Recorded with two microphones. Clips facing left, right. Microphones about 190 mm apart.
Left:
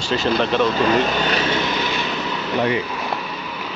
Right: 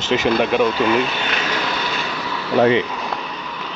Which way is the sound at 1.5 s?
20° left (ahead or behind).